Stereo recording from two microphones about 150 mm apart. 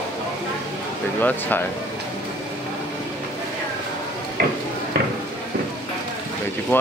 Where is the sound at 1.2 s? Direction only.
10° left (ahead or behind).